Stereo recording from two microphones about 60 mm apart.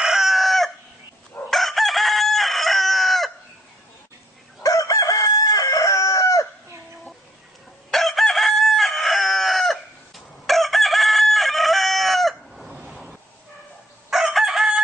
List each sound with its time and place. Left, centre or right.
0.0 s chicken: centre
4.6 s chicken: left
7.9 s chicken: centre
14.1 s chicken: centre